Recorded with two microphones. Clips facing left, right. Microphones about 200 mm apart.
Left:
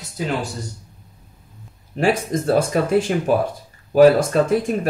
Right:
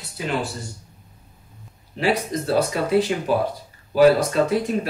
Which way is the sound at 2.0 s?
50° left (ahead or behind).